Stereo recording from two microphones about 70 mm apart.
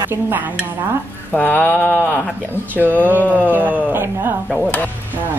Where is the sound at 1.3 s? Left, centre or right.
Left.